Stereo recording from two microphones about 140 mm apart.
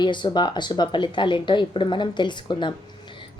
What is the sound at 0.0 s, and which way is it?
A woman's voice, 35° left (ahead or behind).